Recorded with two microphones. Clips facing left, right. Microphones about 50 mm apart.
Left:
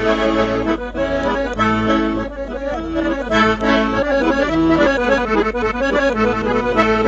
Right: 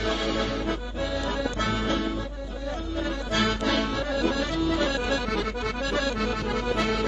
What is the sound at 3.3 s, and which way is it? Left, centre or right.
Accordion, left.